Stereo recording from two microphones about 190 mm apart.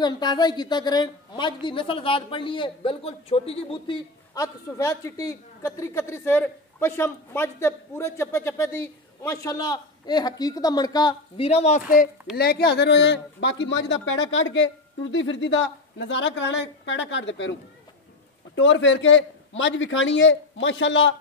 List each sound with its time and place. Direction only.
0.0 s a woman's voice: 20° left (ahead or behind); by 12.1 s 40° left (ahead or behind)
12.4 s a man's voice: 55° left (ahead or behind); by 21.1 s 75° left (ahead or behind)